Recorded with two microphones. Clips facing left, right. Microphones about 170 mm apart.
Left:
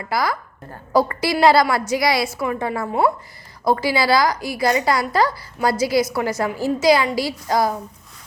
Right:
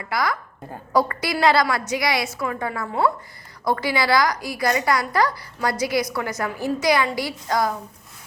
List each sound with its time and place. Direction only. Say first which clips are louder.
0.0 s a woman's voice: left 2 dB; 30° left (ahead or behind)